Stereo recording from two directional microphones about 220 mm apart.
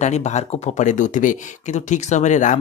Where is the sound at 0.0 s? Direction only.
30° left (ahead or behind).